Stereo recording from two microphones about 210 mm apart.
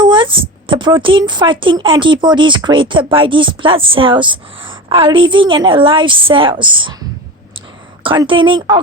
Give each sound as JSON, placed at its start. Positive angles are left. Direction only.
{"t": 0.0, "sound": "a woman's voice", "side_deg": -20}
{"t": 8.0, "sound": "a woman's voice", "side_deg": -25}